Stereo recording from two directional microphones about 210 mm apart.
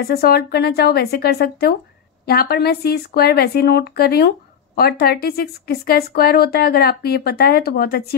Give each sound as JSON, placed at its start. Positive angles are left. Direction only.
{"t": 0.0, "sound": "speech", "side_deg": 45}